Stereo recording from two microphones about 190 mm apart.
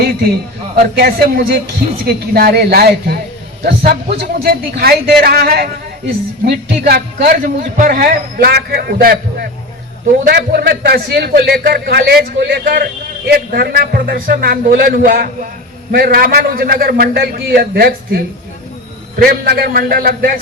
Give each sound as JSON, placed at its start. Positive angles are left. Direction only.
{"t": 0.8, "sound": "a man's voice", "side_deg": -55}
{"t": 19.2, "sound": "a man's voice", "side_deg": -55}